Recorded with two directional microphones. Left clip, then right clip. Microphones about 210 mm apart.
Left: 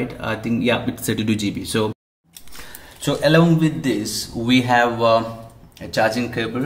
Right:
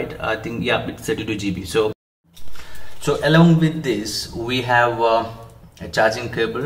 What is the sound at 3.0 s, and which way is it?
Speech, 40° left (ahead or behind).